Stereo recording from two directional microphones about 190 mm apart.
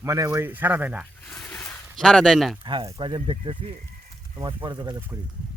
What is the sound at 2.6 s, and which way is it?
Speech, 25° right (ahead or behind).